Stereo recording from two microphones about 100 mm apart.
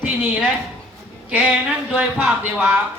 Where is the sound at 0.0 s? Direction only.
15° right (ahead or behind).